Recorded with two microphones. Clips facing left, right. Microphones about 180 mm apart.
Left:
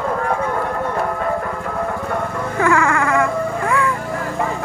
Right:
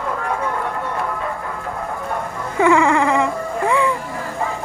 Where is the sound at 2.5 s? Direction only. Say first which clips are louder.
Right 3 dB; 20° right (ahead or behind).